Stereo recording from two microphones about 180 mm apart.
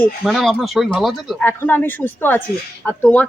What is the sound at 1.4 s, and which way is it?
Speech, 10° left (ahead or behind).